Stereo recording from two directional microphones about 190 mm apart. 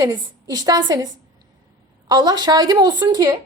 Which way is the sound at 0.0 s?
20° right (ahead or behind).